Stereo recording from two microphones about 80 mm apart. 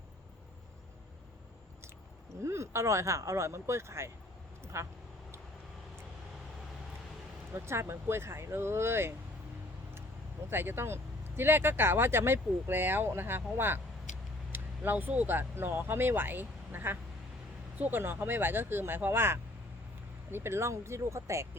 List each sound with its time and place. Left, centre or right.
2.3 s speech: right
4.6 s a sound: right
7.5 s speech: right
10.5 s speech: right